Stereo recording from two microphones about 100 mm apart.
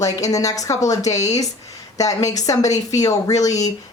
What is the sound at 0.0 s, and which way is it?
A woman's voice, 35° left (ahead or behind).